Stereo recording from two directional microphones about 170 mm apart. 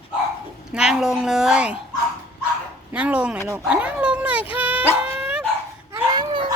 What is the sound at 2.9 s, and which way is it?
Speech, 10° right (ahead or behind).